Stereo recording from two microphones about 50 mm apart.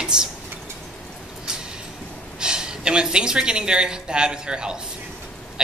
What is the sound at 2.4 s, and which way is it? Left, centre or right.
A woman's voice, centre.